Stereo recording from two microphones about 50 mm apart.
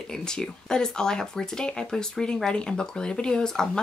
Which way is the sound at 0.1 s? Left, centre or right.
Centre.